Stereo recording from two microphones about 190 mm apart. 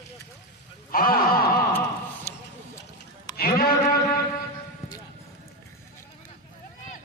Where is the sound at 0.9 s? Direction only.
50° left (ahead or behind).